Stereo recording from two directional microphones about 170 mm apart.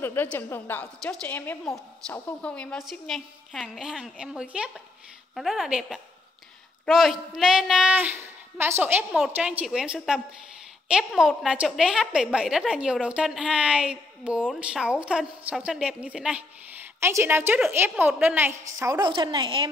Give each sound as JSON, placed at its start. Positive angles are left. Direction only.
{"t": 0.0, "sound": "a woman's voice", "side_deg": 10}